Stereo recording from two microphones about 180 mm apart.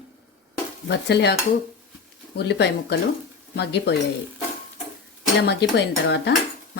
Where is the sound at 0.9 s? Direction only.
70° left (ahead or behind).